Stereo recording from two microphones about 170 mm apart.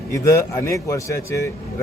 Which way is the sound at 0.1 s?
15° left (ahead or behind).